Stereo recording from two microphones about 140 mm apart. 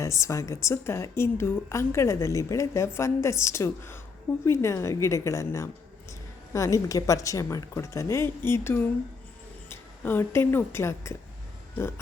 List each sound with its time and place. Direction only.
0.0 s a woman's voice: 20° left (ahead or behind)